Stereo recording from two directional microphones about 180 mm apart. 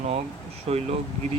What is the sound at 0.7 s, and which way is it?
Speech, 35° right (ahead or behind).